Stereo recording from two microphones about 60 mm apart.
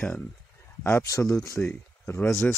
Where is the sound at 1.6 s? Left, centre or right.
Left.